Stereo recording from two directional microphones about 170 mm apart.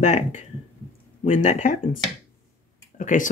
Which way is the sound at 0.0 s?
45° left (ahead or behind).